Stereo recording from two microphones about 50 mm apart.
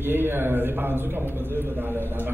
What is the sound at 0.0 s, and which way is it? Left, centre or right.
A man's voice, right.